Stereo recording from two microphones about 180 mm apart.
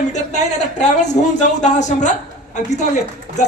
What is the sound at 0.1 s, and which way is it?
A man's voice, 40° left (ahead or behind).